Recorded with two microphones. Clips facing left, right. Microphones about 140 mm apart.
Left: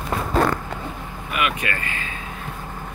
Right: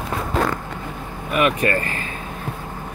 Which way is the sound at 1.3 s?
40° right (ahead or behind).